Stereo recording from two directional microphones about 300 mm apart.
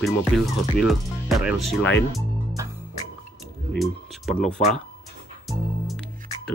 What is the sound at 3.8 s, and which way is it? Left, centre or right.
Speech, centre.